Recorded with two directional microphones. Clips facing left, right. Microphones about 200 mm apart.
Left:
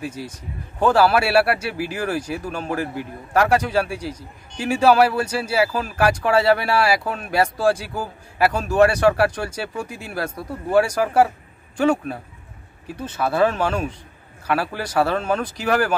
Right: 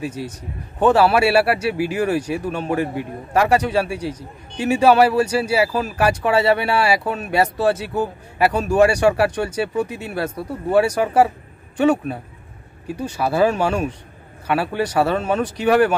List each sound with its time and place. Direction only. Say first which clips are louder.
0.2 s speech: right 3 dB; centre (ahead or behind)